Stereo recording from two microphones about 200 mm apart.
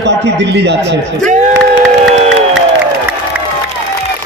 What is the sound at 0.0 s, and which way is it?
Speech, 60° right (ahead or behind).